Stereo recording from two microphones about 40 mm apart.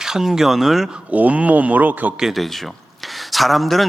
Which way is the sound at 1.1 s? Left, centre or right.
Right.